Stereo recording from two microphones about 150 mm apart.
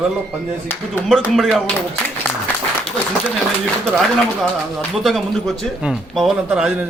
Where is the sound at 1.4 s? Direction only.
Centre (ahead or behind).